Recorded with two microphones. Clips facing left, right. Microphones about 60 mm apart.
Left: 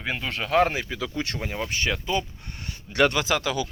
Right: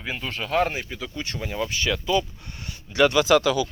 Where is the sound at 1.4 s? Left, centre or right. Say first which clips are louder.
Right 5 dB; left.